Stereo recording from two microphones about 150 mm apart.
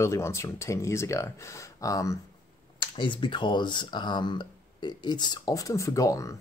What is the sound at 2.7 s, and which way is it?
Speech, 35° left (ahead or behind).